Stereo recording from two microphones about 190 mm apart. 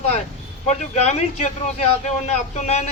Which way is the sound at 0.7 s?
35° left (ahead or behind).